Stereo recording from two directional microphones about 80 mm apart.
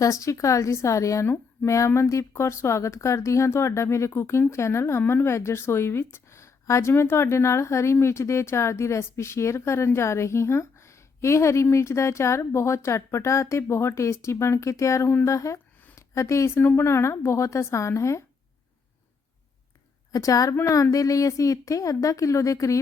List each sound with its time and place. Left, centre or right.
0.0 s a woman's voice: left
15.4 s a woman's voice: left
20.1 s a woman's voice: left